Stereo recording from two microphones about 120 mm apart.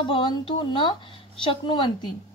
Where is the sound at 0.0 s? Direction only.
40° left (ahead or behind).